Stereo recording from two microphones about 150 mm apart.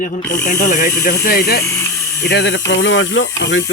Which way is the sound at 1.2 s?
80° left.